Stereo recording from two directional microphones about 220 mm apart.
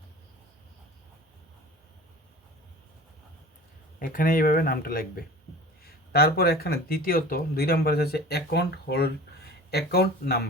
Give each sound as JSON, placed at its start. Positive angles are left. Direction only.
{"t": 4.0, "sound": "speech", "side_deg": 40}